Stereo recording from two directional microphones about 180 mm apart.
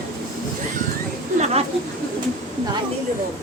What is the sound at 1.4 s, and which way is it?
Speech, 35° right (ahead or behind).